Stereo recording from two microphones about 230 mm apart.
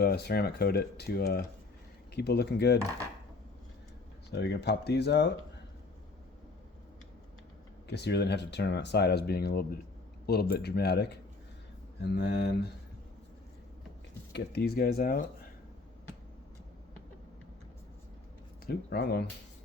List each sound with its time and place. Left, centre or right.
0.0 s speech: left
4.3 s speech: left
7.9 s speech: left
14.3 s speech: left
18.6 s speech: left